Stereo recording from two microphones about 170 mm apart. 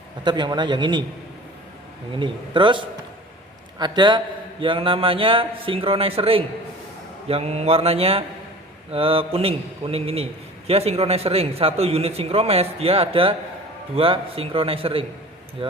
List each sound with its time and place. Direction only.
0.3 s a man's voice: 25° right (ahead or behind)
2.1 s a man's voice: 30° right (ahead or behind)